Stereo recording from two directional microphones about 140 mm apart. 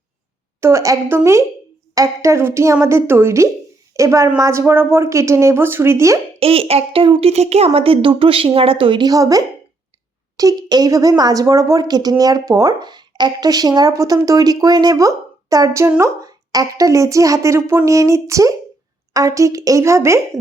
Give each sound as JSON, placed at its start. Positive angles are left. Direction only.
{"t": 0.6, "sound": "speech", "side_deg": -20}
{"t": 6.4, "sound": "a woman's voice", "side_deg": -45}